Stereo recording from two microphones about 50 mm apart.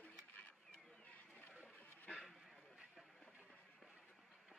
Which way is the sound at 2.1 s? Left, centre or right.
Centre.